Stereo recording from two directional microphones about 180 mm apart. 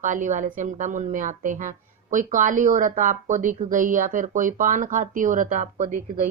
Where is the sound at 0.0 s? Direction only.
45° right (ahead or behind).